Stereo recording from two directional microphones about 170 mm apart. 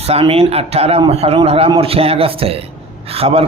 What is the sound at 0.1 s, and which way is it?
A man's voice, 35° right (ahead or behind).